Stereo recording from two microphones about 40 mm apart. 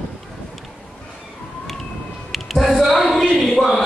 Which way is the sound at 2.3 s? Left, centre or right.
Centre.